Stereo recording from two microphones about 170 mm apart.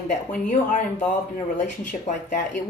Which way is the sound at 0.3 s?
45° left (ahead or behind).